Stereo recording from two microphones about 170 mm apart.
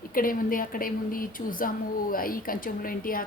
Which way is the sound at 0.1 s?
55° left (ahead or behind).